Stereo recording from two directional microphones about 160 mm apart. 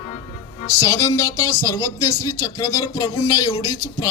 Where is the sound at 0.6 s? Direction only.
20° left (ahead or behind).